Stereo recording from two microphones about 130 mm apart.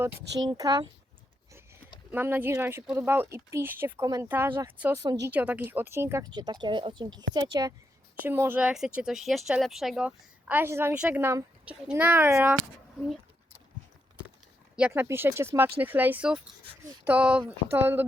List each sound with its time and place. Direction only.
0.3 s speech: 30° right (ahead or behind)
2.1 s speech: 15° right (ahead or behind)
5.0 s a woman's voice: 30° right (ahead or behind)
5.3 s speech: 10° right (ahead or behind)
6.3 s speech: 35° right (ahead or behind)
8.2 s a woman's voice: 15° right (ahead or behind)
10.9 s speech: 10° right (ahead or behind)
11.2 s a woman's voice: 20° right (ahead or behind)
14.8 s speech: 10° right (ahead or behind)
15.0 s speech: 20° right (ahead or behind)